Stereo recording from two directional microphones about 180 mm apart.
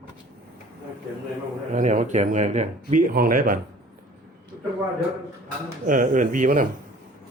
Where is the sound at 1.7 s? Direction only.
45° right (ahead or behind).